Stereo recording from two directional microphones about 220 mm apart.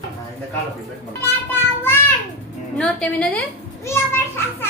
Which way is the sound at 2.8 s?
5° left (ahead or behind).